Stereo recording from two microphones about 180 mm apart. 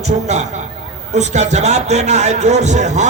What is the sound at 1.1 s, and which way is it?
A man's voice, 40° right (ahead or behind).